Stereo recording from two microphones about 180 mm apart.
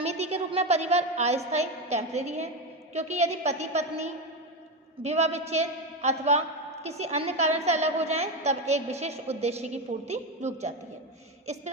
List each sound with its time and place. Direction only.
0.0 s a woman's voice: 35° right (ahead or behind)